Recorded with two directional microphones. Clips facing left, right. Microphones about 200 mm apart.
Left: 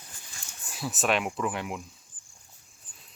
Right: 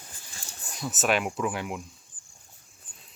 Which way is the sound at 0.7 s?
Centre (ahead or behind).